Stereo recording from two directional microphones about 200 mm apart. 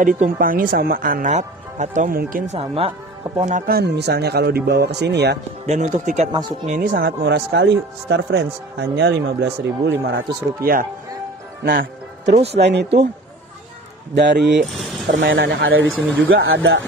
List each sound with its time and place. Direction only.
0.0 s speech: 45° right (ahead or behind); by 2.9 s 30° right (ahead or behind)
3.3 s speech: 40° right (ahead or behind); by 5.4 s 55° right (ahead or behind)
5.7 s speech: 35° right (ahead or behind); by 9.9 s 65° right (ahead or behind)
10.6 s speech: 45° right (ahead or behind)
11.6 s music: 45° right (ahead or behind)
12.5 s speech: 60° right (ahead or behind)
14.1 s speech: 60° right (ahead or behind)